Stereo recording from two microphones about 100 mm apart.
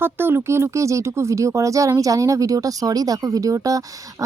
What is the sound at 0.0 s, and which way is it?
Speech, 20° right (ahead or behind).